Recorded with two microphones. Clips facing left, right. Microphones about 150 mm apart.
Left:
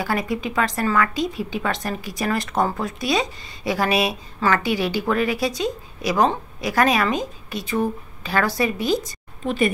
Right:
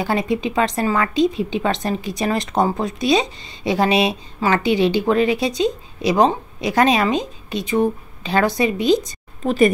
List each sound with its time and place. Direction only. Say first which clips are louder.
0.0 s a woman's voice: right 4 dB; 25° right (ahead or behind)